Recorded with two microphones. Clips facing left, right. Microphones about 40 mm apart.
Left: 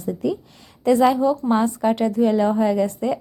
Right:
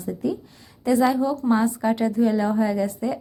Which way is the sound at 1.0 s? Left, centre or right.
Left.